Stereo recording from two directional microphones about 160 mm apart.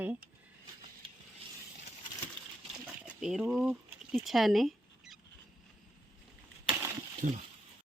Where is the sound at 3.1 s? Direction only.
5° right (ahead or behind).